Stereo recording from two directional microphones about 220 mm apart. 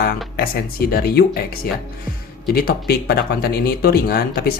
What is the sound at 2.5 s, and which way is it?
Speech, 45° left (ahead or behind).